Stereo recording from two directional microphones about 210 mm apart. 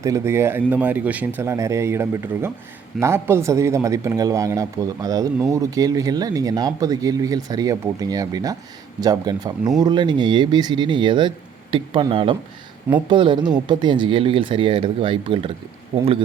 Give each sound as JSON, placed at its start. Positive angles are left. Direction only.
{"t": 0.0, "sound": "speech", "side_deg": -15}